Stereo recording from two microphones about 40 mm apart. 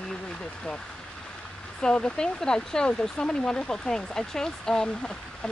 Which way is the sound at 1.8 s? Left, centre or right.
Left.